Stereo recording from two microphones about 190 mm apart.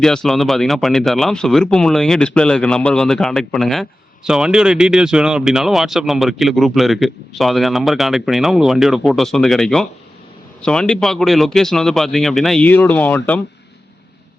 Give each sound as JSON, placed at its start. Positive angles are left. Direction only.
{"t": 0.0, "sound": "speech", "side_deg": 5}